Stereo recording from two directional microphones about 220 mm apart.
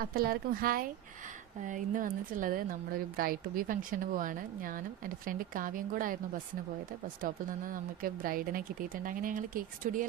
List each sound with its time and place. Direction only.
0.0 s speech: 40° right (ahead or behind)
7.2 s speech: 40° right (ahead or behind)